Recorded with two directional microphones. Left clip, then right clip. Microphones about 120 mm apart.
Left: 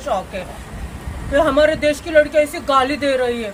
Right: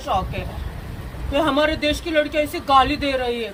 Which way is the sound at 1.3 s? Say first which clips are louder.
Left 5 dB; 35° left (ahead or behind).